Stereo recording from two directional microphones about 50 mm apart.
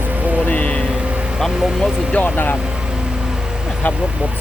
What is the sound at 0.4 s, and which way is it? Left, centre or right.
Vehicle, left.